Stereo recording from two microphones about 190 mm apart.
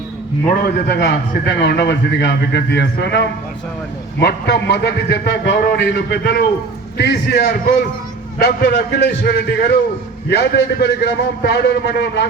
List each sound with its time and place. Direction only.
0.6 s a man's voice: 55° left (ahead or behind)